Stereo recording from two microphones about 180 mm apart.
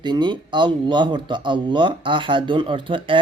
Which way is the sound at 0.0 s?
25° right (ahead or behind).